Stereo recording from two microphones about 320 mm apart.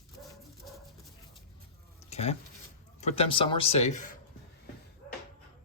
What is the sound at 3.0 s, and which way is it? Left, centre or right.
A man's voice, centre.